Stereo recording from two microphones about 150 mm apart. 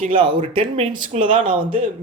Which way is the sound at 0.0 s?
35° right (ahead or behind).